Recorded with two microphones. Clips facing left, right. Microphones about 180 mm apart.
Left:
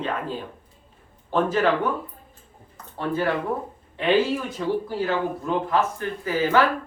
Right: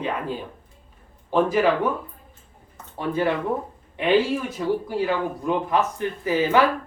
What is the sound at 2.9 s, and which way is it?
Speech, 15° right (ahead or behind).